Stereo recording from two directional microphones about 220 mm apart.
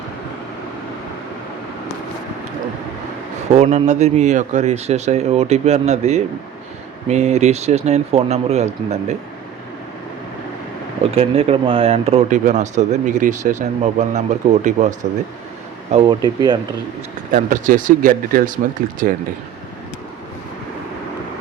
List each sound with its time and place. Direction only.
3.5 s speech: 30° right (ahead or behind)
11.1 s speech: 25° right (ahead or behind)
15.9 s speech: 20° right (ahead or behind)
17.3 s speech: 35° right (ahead or behind)